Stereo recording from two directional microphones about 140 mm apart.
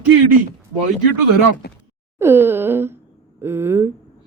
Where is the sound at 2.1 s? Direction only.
15° right (ahead or behind).